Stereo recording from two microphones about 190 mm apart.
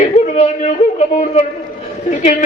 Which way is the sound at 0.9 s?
35° left (ahead or behind).